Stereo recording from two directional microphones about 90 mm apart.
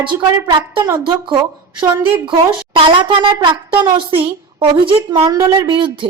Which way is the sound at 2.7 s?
70° right (ahead or behind).